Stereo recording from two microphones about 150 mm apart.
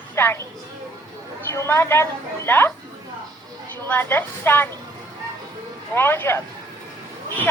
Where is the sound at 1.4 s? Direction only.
15° left (ahead or behind).